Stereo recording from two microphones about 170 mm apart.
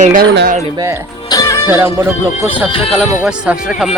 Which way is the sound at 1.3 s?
20° left (ahead or behind).